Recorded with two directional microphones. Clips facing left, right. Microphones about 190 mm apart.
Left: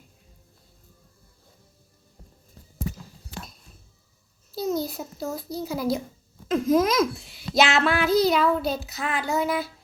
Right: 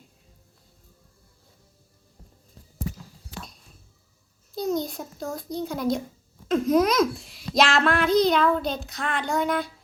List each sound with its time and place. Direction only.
4.5 s a child's voice: 5° left (ahead or behind)